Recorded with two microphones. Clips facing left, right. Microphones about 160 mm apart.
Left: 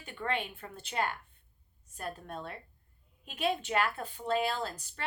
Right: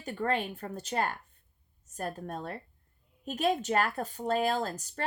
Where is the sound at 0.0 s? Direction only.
40° right (ahead or behind).